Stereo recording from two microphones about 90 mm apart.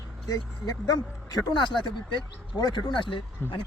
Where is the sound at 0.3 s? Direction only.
45° left (ahead or behind).